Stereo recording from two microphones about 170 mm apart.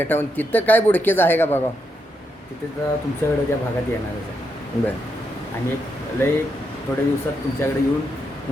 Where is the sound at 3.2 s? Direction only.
15° left (ahead or behind).